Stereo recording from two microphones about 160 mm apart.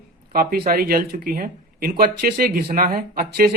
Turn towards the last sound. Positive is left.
turn(degrees=-65)  # may be behind; listen again after turning